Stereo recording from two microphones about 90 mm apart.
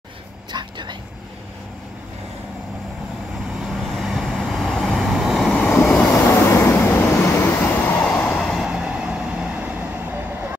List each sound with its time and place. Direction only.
0.5 s vehicle: 55° right (ahead or behind)
3.6 s vehicle: centre (ahead or behind)
5.9 s train: 20° left (ahead or behind)
6.2 s vehicle: 30° left (ahead or behind)
8.4 s vehicle: centre (ahead or behind)
8.6 s vehicle: 10° right (ahead or behind)